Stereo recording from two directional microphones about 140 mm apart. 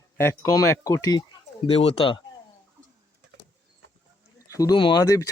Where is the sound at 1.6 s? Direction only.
45° left (ahead or behind).